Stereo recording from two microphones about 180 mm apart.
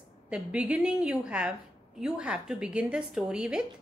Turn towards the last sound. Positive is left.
turn(degrees=-5)  # may be behind; listen again after turning